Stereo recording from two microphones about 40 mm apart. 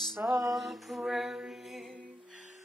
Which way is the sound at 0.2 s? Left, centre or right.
Right.